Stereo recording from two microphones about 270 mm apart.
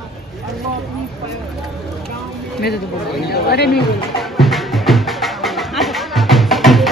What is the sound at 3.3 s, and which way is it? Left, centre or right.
Speech, left.